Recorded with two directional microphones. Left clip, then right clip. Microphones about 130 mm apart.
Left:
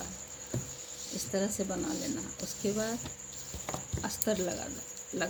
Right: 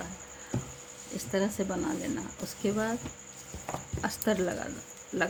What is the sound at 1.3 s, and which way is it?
Insect, 30° right (ahead or behind).